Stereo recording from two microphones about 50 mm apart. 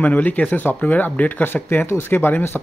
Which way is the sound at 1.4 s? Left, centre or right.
Left.